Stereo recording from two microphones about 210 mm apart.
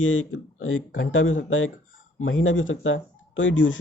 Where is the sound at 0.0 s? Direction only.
70° left (ahead or behind).